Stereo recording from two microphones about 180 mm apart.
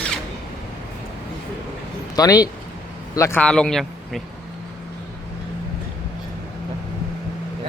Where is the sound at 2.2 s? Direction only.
20° left (ahead or behind); by 4.2 s centre (ahead or behind).